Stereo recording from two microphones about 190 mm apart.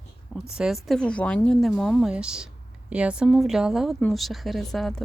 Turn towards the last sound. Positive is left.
turn(degrees=0)  # may be behind; listen again after turning